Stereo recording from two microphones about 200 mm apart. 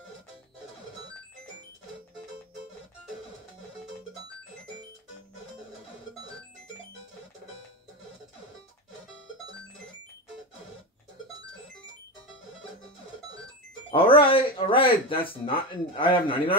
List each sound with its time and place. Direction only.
13.8 s speech: 25° left (ahead or behind)